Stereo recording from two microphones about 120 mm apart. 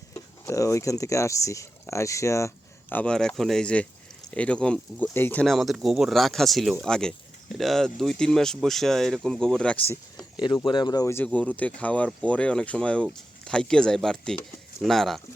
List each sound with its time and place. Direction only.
0.1 s speech: 25° left (ahead or behind)
2.9 s speech: 10° left (ahead or behind)
5.5 s speech: centre (ahead or behind); by 10.0 s 15° left (ahead or behind)
10.4 s speech: 40° left (ahead or behind)
11.0 s speech: 20° left (ahead or behind); by 15.2 s centre (ahead or behind)